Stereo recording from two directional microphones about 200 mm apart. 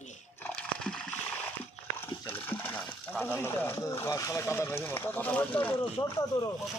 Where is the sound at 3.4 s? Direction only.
10° left (ahead or behind).